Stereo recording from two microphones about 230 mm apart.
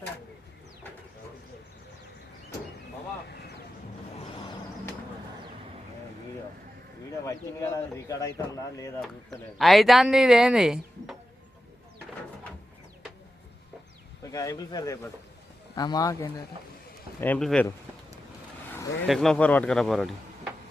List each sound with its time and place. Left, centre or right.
7.3 s speech: centre
9.6 s speech: centre
14.3 s speech: centre
19.0 s speech: centre